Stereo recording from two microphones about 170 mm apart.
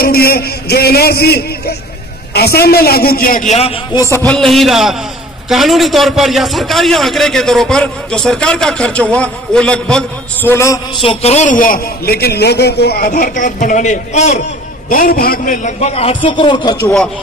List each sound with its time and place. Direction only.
0.0 s a man's voice: 60° left (ahead or behind); by 3.7 s 40° left (ahead or behind)
4.3 s a man's voice: centre (ahead or behind)
10.5 s a man's voice: 15° left (ahead or behind)
11.0 s a man's voice: 35° left (ahead or behind)
14.9 s a man's voice: 55° left (ahead or behind); by 16.9 s 25° left (ahead or behind)